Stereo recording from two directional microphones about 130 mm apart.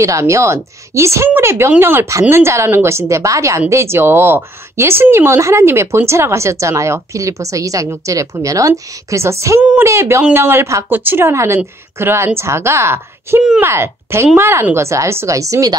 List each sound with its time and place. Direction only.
0.0 s speech: 25° right (ahead or behind)